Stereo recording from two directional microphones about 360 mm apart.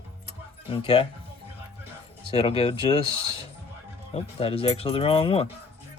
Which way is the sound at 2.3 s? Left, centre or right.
Centre.